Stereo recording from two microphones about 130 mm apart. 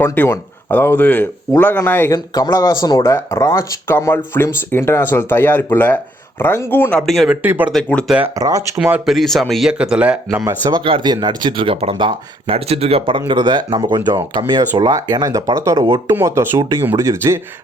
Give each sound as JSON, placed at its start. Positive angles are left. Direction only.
{"t": 0.0, "sound": "speech", "side_deg": 15}
{"t": 2.1, "sound": "speech", "side_deg": 30}
{"t": 7.0, "sound": "speech", "side_deg": 0}
{"t": 7.4, "sound": "speech", "side_deg": -15}
{"t": 7.7, "sound": "speech", "side_deg": 5}
{"t": 8.0, "sound": "speech", "side_deg": -5}
{"t": 8.4, "sound": "speech", "side_deg": -30}
{"t": 8.8, "sound": "speech", "side_deg": -5}
{"t": 10.4, "sound": "speech", "side_deg": -35}